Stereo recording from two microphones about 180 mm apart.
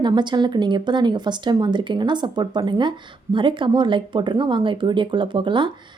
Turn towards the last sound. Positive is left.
turn(degrees=-25)  # may be behind; listen again after turning